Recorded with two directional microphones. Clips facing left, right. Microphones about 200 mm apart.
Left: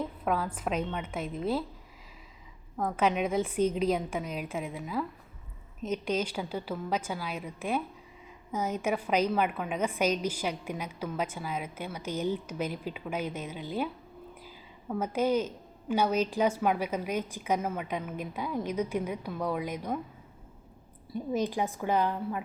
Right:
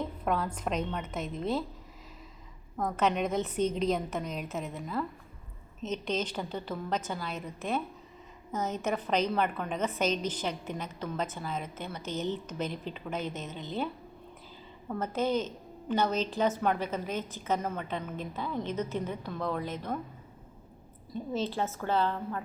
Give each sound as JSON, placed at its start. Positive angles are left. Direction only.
{"t": 0.0, "sound": "a woman's voice", "side_deg": 5}
{"t": 2.7, "sound": "a woman's voice", "side_deg": 10}
{"t": 21.1, "sound": "a woman's voice", "side_deg": 15}